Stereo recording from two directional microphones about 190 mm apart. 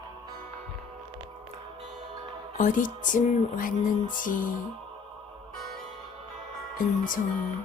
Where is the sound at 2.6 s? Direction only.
45° left (ahead or behind).